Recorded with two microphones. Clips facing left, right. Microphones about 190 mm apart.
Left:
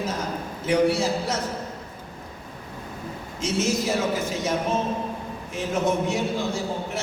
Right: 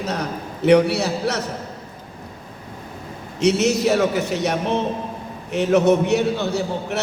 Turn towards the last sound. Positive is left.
turn(degrees=-70)  # may be behind; listen again after turning